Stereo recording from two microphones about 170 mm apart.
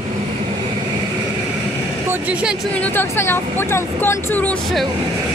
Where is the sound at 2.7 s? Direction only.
10° left (ahead or behind).